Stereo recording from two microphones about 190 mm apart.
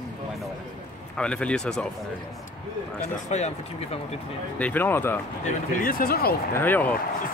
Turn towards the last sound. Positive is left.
turn(degrees=10)  # may be behind; listen again after turning